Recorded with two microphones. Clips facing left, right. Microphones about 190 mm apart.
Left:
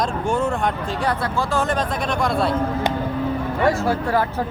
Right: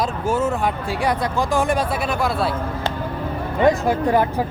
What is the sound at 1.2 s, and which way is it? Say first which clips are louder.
Speech: right 2 dB; 15° right (ahead or behind).